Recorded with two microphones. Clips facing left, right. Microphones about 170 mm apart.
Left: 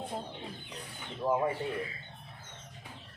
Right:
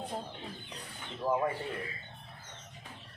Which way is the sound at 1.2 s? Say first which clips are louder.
Left 1 dB; 25° left (ahead or behind).